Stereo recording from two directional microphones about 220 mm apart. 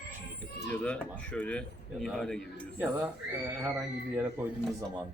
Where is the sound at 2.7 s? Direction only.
10° right (ahead or behind).